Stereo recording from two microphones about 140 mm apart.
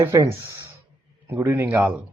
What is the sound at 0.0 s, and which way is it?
Speech, 20° right (ahead or behind).